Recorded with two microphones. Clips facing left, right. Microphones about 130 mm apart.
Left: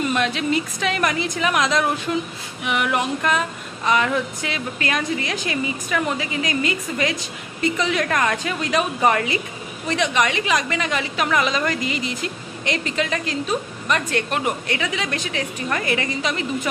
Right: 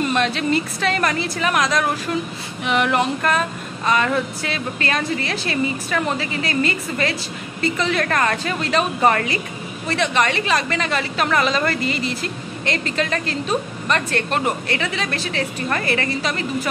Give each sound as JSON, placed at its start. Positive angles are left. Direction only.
{"t": 0.1, "sound": "a woman's voice", "side_deg": 10}
{"t": 2.6, "sound": "a woman's voice", "side_deg": 10}